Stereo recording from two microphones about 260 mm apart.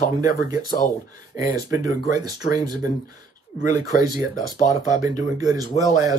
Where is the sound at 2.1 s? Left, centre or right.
Centre.